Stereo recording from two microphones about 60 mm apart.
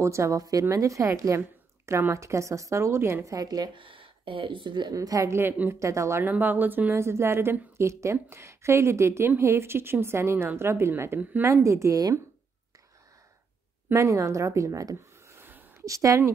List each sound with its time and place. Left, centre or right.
0.0 s a woman's voice: right
1.9 s a woman's voice: right
3.3 s a woman's voice: right
4.9 s a woman's voice: right
5.3 s speech: right
5.8 s a woman's voice: right
6.2 s speech: right
7.0 s a woman's voice: right
11.4 s a woman's voice: right
13.9 s a woman's voice: right
15.8 s speech: right